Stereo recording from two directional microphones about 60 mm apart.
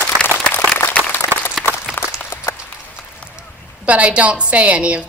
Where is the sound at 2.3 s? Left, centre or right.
Left.